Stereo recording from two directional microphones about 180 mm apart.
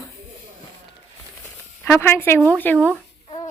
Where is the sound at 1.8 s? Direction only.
10° left (ahead or behind).